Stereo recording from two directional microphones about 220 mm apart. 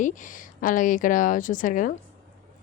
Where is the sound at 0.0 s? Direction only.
35° left (ahead or behind).